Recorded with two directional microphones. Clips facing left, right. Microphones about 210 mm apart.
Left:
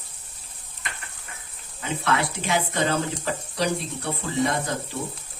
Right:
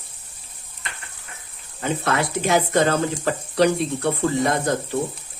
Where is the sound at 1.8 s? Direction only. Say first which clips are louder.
Right 3 dB; 45° right (ahead or behind).